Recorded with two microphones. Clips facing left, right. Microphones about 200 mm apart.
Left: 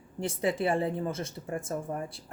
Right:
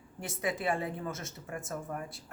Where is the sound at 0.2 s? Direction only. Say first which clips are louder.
Left 6 dB; 30° left (ahead or behind).